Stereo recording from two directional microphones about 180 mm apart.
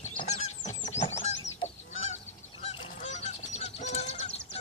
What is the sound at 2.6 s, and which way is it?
Goose, 30° left (ahead or behind).